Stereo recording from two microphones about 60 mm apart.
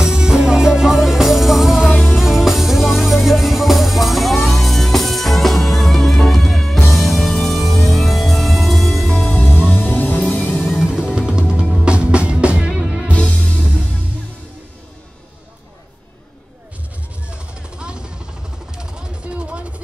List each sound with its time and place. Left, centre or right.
0.0 s music: centre
9.4 s music: left
10.7 s music: centre
13.1 s music: centre
17.3 s vehicle: centre
18.8 s a sound: centre